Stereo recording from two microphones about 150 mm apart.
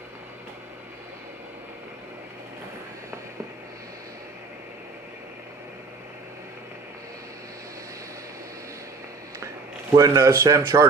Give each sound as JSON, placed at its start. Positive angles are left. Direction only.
{"t": 9.9, "sound": "speech", "side_deg": -20}